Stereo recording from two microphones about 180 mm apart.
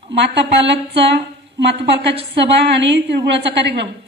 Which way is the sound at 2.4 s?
75° right (ahead or behind).